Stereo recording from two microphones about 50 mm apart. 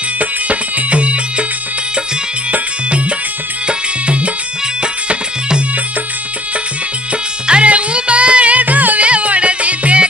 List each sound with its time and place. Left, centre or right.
0.2 s music: right
2.5 s music: right
7.4 s music: right